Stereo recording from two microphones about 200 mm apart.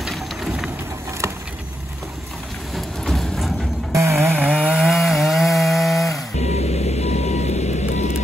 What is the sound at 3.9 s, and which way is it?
Music, 15° right (ahead or behind).